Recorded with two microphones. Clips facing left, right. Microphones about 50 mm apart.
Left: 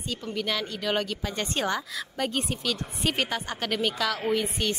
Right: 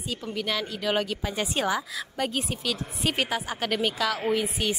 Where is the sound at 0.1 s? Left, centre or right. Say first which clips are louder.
Even; centre.